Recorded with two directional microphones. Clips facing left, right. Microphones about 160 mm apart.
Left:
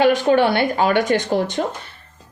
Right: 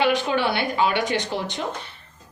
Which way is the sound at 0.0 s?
45° left (ahead or behind).